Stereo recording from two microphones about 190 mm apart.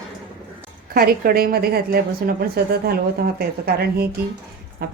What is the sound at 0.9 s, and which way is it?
A woman's voice, 50° right (ahead or behind).